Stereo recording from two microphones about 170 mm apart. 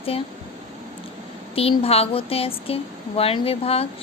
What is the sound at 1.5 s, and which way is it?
A woman's voice, 35° left (ahead or behind).